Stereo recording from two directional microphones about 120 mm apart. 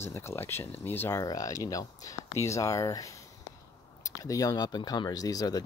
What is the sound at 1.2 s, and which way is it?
Speech, 30° left (ahead or behind).